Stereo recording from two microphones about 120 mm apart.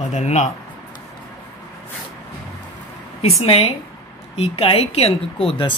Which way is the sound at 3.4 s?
60° left (ahead or behind).